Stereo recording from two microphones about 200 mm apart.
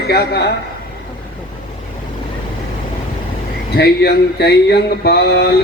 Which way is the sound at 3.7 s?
55° left (ahead or behind).